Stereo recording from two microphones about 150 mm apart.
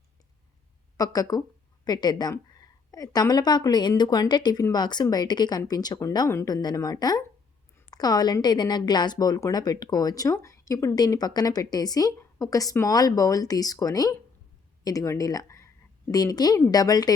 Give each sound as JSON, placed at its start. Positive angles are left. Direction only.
{"t": 0.9, "sound": "speech", "side_deg": 25}